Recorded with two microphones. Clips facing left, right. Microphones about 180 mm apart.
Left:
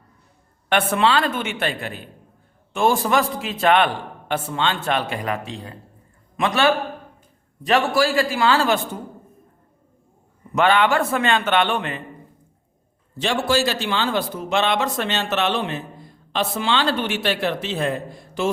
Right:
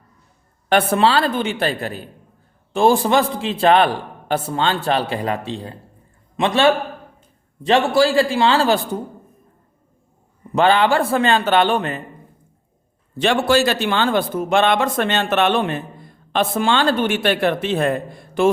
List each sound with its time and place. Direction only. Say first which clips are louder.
0.7 s a man's voice: right 3 dB; 35° right (ahead or behind)
10.5 s a man's voice: right 2 dB; 30° right (ahead or behind)
13.1 s speech: right 4 dB; 60° right (ahead or behind)